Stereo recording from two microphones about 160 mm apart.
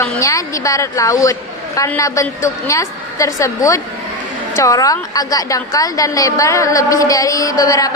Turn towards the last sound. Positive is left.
turn(degrees=20)  # may be behind; listen again after turning